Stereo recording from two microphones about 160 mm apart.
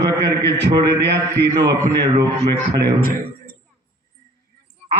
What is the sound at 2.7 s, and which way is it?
Speech, 85° right.